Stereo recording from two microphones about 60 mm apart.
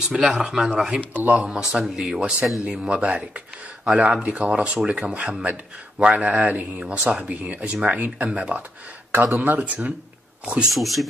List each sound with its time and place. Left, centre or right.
0.1 s speech: centre
1.1 s speech: right
1.4 s speech: centre
3.0 s speech: right
10.7 s speech: centre